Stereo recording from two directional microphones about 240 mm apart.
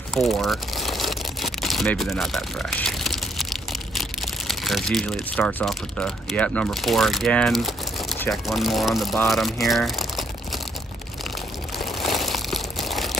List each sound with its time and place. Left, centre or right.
0.1 s crumpling: centre
3.9 s speech: centre
11.8 s crumpling: centre